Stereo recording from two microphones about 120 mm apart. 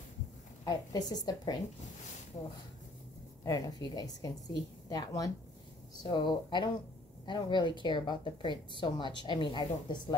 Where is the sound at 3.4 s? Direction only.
35° left (ahead or behind).